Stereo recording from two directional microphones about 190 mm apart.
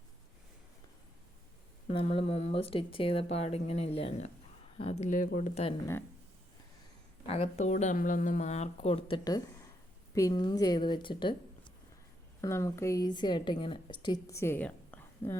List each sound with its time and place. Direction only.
1.9 s speech: 30° left (ahead or behind)
7.3 s a woman's voice: 30° left (ahead or behind)
12.4 s a woman's voice: 15° left (ahead or behind)